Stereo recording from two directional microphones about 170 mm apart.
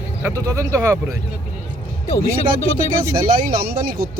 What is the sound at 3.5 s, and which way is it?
Speech, 60° right (ahead or behind).